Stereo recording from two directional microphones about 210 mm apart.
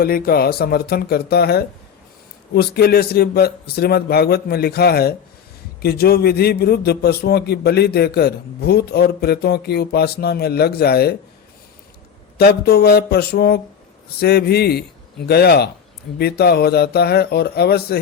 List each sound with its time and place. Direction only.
0.0 s a man's voice: 45° left (ahead or behind)
12.4 s a man's voice: 50° left (ahead or behind)